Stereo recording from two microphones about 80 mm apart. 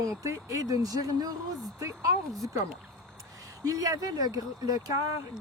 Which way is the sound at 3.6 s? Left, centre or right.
Right.